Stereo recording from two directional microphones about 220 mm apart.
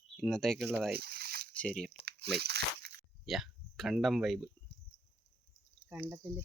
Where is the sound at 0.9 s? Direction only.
45° right (ahead or behind).